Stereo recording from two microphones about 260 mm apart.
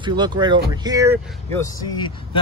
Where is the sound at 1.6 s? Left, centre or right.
Centre.